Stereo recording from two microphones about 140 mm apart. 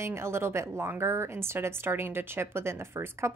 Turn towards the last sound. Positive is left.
turn(degrees=-20)  # may be behind; listen again after turning